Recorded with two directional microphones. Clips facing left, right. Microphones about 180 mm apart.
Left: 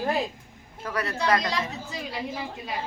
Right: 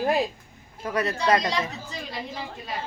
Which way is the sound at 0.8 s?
25° right (ahead or behind).